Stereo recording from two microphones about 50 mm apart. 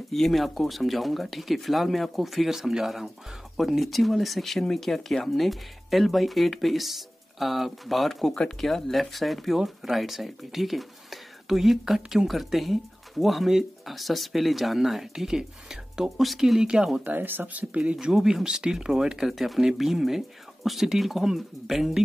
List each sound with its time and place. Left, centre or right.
0.1 s speech: centre
17.0 s speech: right
18.0 s speech: centre